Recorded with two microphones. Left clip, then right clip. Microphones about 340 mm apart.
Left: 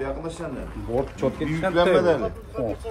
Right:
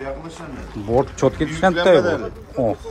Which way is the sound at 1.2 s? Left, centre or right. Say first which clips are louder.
Right 7 dB; right.